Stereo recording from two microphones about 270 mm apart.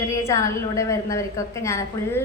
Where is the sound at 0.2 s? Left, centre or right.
Centre.